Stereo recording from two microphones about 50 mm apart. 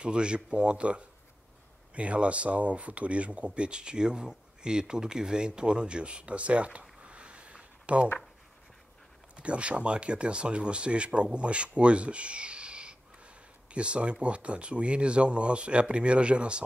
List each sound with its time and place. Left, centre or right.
0.0 s speech: centre
7.0 s a sound: right
9.4 s speech: right